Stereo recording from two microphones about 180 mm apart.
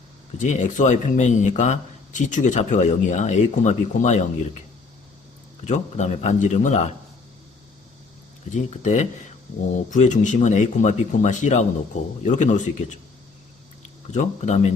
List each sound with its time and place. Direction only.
0.3 s speech: 40° left (ahead or behind)
5.6 s speech: 40° left (ahead or behind)
8.5 s speech: 40° left (ahead or behind)
14.1 s speech: 40° left (ahead or behind)